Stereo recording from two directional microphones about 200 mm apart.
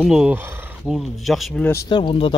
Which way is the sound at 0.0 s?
5° right (ahead or behind).